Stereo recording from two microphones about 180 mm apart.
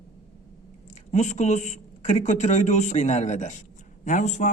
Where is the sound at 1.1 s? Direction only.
40° left (ahead or behind).